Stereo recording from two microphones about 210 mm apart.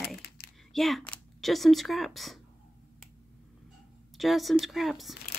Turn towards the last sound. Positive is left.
turn(degrees=0)  # may be behind; listen again after turning